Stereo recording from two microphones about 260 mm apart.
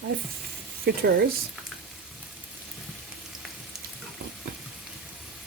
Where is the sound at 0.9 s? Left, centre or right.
Right.